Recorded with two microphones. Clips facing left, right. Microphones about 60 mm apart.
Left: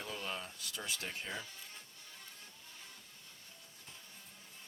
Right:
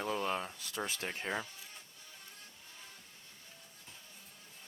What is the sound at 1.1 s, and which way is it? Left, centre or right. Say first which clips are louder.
Speech: right 5 dB; right.